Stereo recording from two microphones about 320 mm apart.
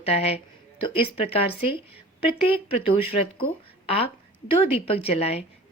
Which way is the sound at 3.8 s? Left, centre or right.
Centre.